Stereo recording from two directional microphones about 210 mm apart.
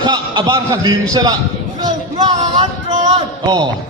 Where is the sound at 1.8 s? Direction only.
20° right (ahead or behind).